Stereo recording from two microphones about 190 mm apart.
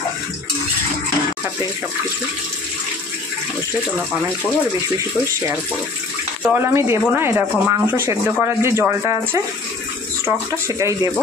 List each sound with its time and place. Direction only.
6.4 s speech: 15° right (ahead or behind)